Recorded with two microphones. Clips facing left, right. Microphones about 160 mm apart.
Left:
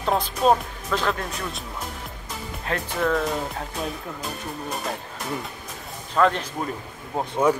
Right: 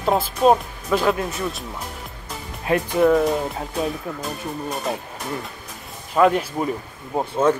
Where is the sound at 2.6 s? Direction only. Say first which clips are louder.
Right 8 dB; 15° right (ahead or behind).